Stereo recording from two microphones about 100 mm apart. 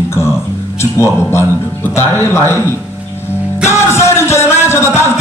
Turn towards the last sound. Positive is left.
turn(degrees=25)  # may be behind; listen again after turning